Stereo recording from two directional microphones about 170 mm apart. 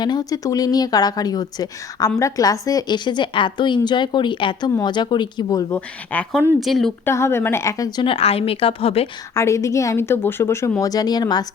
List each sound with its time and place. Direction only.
0.0 s speech: 25° left (ahead or behind)
6.1 s a woman's voice: 5° left (ahead or behind)
7.0 s speech: 15° left (ahead or behind); by 9.0 s 35° left (ahead or behind)
9.3 s speech: 15° left (ahead or behind)